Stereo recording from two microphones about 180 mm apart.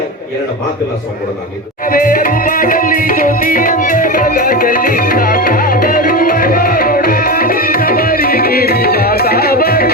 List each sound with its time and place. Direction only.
1.9 s music: 50° left (ahead or behind)